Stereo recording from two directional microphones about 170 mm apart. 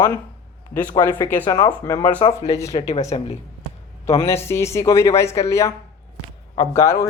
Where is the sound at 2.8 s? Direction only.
40° left (ahead or behind).